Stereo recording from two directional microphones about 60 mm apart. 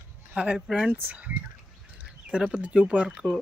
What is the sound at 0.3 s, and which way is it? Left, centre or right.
Speech, centre.